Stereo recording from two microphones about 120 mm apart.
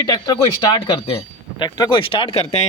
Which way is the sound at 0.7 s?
45° left (ahead or behind).